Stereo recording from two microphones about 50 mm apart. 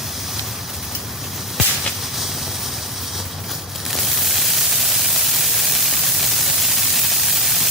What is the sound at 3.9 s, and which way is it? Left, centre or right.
Static, centre.